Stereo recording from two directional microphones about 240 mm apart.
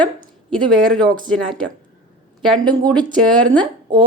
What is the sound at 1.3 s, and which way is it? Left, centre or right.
Speech, centre.